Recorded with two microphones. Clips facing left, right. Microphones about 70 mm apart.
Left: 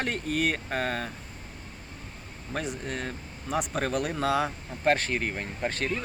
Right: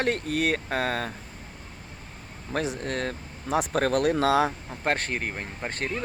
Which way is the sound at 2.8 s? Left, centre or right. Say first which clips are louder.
Right 4 dB; right.